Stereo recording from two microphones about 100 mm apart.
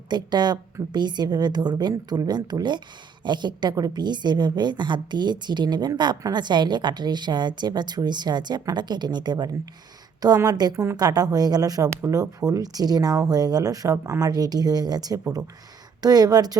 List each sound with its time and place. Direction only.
0.1 s a woman's voice: 45° right (ahead or behind)